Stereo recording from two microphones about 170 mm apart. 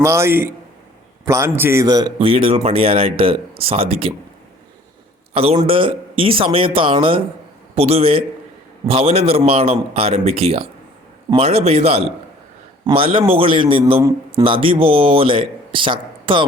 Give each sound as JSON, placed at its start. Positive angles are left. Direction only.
{"t": 0.0, "sound": "a man's voice", "side_deg": -15}
{"t": 5.3, "sound": "a man's voice", "side_deg": -35}